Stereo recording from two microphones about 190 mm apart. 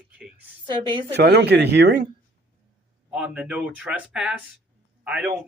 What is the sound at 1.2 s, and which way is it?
Speech, 60° right (ahead or behind).